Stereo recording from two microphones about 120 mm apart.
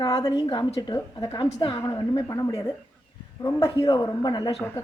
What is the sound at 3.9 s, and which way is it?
Speech, 40° left (ahead or behind).